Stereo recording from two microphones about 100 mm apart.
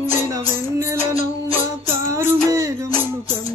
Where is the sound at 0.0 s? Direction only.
40° left (ahead or behind).